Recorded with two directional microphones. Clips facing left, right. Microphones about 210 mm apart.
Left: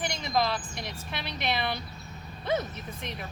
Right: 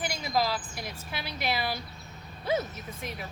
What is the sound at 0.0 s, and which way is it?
Speech, 5° right (ahead or behind).